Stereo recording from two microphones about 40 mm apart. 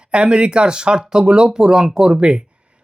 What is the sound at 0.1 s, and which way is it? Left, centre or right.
Speech, right.